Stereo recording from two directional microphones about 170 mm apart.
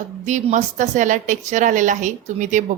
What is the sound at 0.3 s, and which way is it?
A woman's voice, 45° right (ahead or behind).